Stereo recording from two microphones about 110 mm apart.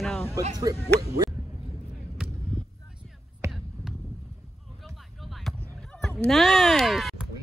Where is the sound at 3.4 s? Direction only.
30° right (ahead or behind).